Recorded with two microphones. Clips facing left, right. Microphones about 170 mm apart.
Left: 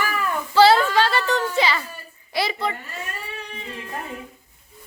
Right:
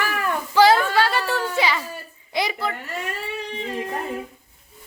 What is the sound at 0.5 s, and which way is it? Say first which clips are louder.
A woman's voice: left 1 dB; 10° right (ahead or behind).